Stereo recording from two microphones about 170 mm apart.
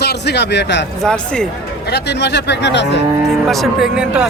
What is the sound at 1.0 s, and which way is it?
Speech, 5° left (ahead or behind).